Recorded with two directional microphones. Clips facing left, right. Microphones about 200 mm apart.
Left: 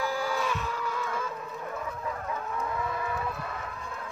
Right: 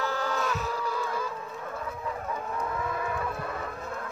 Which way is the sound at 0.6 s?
35° right (ahead or behind).